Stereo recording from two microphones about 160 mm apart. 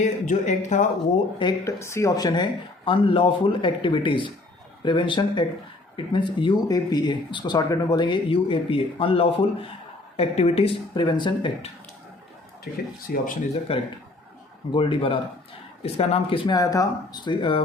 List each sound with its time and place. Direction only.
0.0 s a sound: 50° left (ahead or behind)
1.4 s speech: 25° left (ahead or behind)
13.1 s speech: 70° left (ahead or behind)
13.7 s speech: 35° left (ahead or behind)